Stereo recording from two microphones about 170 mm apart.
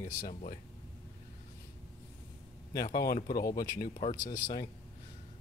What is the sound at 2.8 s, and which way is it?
Speech, 60° left (ahead or behind).